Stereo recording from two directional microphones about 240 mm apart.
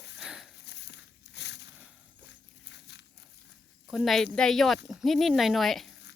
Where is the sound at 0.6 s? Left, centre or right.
Left.